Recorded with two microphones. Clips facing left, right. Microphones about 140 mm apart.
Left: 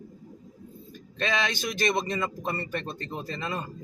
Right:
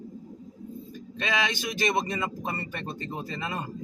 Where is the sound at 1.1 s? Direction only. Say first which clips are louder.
Left 1 dB; 10° right (ahead or behind).